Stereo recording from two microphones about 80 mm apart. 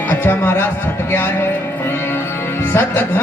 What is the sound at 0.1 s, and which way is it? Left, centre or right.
A man's voice, left.